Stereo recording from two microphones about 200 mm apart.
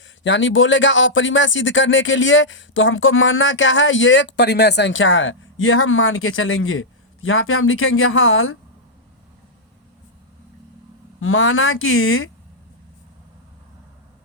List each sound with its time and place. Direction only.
0.0 s speech: 70° left (ahead or behind); by 8.5 s 90° left
11.2 s speech: 85° left